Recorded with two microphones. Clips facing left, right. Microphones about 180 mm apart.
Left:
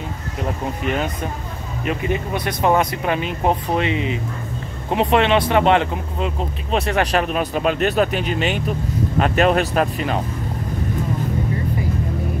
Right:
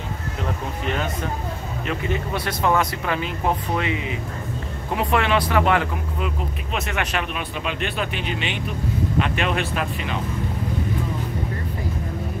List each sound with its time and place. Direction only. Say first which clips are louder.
1.9 s speech: left 4 dB; 15° left (ahead or behind); by 10.2 s 45° left (ahead or behind)